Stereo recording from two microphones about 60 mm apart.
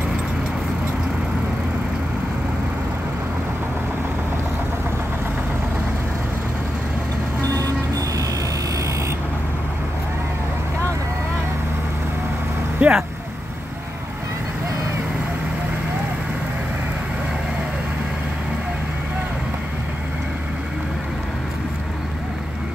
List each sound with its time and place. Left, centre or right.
7.4 s vehicle: right
12.8 s vehicle: right